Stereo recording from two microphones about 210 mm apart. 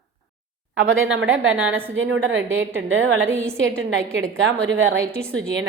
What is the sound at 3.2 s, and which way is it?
Speech, 10° right (ahead or behind).